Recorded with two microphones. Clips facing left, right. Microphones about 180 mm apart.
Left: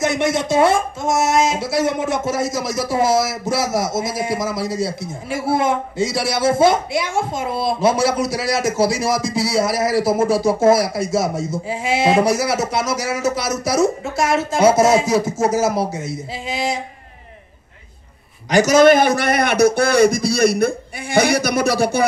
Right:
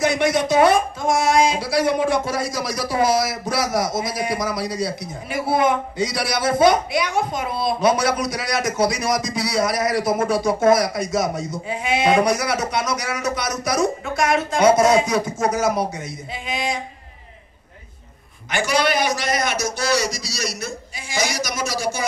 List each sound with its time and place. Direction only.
0.0 s speech: 25° left (ahead or behind)
18.5 s a man's voice: 40° left (ahead or behind); by 22.0 s 60° left (ahead or behind)